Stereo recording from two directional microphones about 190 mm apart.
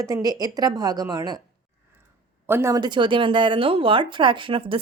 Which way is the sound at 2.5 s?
15° right (ahead or behind).